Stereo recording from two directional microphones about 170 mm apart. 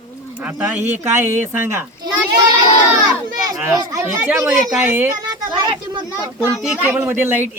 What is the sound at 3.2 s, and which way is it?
Speech, 20° right (ahead or behind).